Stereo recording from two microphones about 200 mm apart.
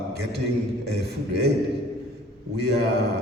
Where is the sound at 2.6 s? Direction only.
55° right (ahead or behind).